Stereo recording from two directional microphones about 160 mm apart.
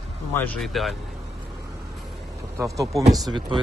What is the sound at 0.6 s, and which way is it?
Speech, centre (ahead or behind).